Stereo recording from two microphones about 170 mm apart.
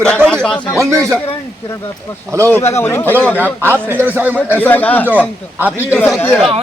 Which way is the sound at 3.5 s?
15° right (ahead or behind).